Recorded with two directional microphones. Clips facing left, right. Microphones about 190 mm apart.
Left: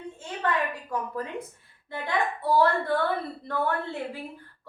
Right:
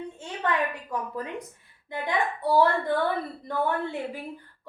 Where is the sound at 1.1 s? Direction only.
15° right (ahead or behind).